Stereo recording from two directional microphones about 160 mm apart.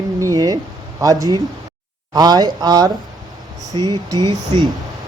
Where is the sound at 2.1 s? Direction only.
25° right (ahead or behind).